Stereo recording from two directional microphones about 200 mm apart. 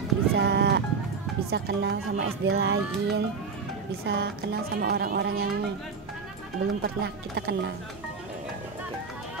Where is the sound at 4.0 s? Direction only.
55° right (ahead or behind).